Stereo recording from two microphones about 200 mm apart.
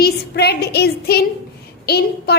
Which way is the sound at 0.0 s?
55° left (ahead or behind).